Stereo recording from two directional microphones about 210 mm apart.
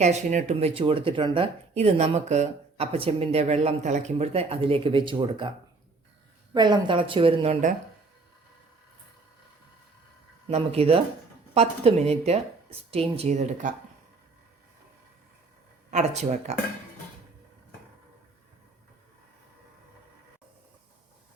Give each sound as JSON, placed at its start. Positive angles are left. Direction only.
{"t": 0.0, "sound": "speech", "side_deg": -35}
{"t": 6.5, "sound": "speech", "side_deg": -20}
{"t": 10.5, "sound": "speech", "side_deg": -30}
{"t": 15.9, "sound": "speech", "side_deg": -35}